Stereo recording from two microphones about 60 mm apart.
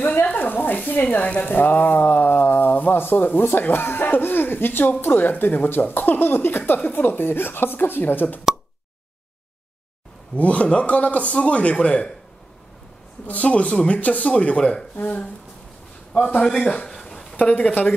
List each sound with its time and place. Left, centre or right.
0.0 s speech: left
10.3 s a man's voice: left
13.3 s a man's voice: left
16.3 s a sound: centre
17.6 s a man's voice: left